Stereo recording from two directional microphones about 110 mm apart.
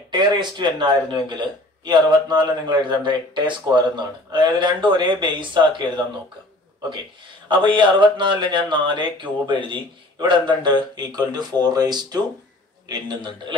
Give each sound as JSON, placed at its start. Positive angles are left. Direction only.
{"t": 0.1, "sound": "a man's voice", "side_deg": -45}
{"t": 7.4, "sound": "a man's voice", "side_deg": -45}